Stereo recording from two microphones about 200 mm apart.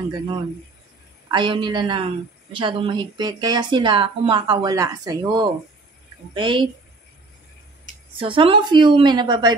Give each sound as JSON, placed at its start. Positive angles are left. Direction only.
{"t": 1.3, "sound": "speech", "side_deg": -25}
{"t": 8.2, "sound": "speech", "side_deg": -25}